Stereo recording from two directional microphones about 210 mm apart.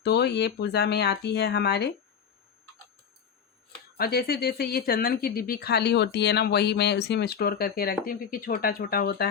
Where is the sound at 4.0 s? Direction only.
45° left (ahead or behind).